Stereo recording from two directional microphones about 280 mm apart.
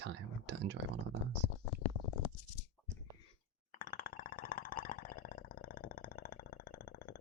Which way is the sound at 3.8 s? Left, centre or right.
Left.